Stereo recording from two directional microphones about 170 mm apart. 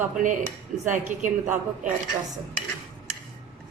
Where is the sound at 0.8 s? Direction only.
50° right (ahead or behind).